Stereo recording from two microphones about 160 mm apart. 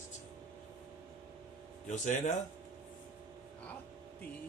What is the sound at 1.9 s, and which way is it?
Speech, 50° left (ahead or behind).